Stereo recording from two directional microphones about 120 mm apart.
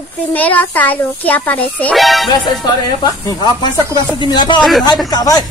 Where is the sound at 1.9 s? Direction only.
Centre (ahead or behind).